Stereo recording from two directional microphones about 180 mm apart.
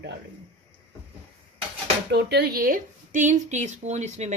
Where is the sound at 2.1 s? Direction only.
65° right (ahead or behind).